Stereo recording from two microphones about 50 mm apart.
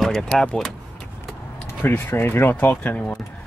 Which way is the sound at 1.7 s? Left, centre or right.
Left.